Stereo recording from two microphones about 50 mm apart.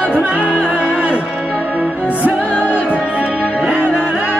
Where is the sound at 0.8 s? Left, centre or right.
Right.